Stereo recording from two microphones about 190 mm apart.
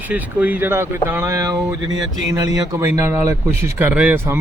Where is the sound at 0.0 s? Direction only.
10° right (ahead or behind).